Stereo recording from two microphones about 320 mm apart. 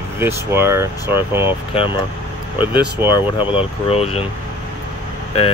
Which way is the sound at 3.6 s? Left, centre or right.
Centre.